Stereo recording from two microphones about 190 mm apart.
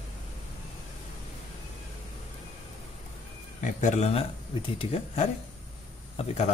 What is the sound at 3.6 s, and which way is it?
Speech, 40° left (ahead or behind).